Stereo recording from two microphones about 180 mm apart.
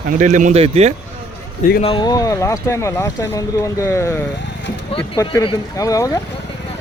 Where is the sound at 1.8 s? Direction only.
30° left (ahead or behind).